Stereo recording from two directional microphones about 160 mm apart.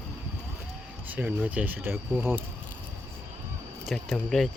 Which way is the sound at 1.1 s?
10° right (ahead or behind).